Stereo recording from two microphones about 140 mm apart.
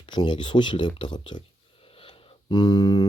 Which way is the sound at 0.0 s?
30° left (ahead or behind).